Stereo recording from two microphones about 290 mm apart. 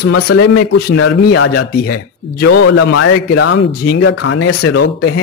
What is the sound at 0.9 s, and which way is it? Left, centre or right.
Speech, left.